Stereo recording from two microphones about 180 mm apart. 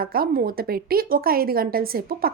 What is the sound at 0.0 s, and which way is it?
A woman's voice, 55° right (ahead or behind).